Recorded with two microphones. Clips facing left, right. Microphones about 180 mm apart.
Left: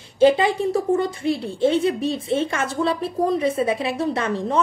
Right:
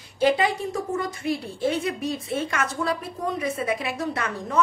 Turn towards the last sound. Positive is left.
turn(degrees=30)  # may be behind; listen again after turning